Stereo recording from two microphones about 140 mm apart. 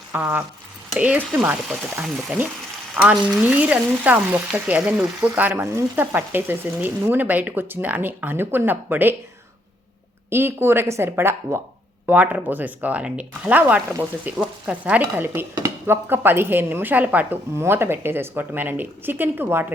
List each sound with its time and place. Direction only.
0.1 s speech: 15° right (ahead or behind)
10.2 s speech: 15° right (ahead or behind)